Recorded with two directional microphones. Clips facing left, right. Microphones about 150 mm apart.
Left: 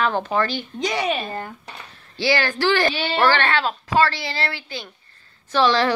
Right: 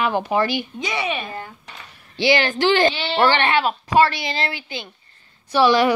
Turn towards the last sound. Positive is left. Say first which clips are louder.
# right 3 dB
turn(degrees=-15)  # may be behind; listen again after turning